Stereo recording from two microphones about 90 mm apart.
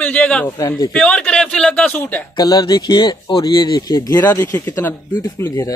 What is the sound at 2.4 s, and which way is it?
Speech, 50° left (ahead or behind).